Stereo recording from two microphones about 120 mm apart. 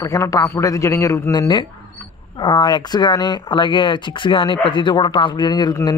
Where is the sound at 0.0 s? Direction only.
25° left (ahead or behind).